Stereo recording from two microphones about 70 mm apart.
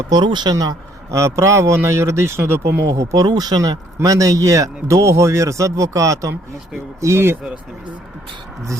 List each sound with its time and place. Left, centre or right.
0.1 s speech: right
1.1 s speech: right
3.2 s speech: right